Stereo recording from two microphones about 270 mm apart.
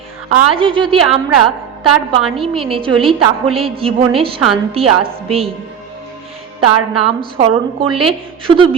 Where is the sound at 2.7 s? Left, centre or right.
Centre.